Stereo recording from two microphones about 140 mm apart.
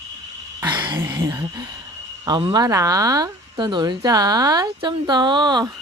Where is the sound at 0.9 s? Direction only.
20° right (ahead or behind).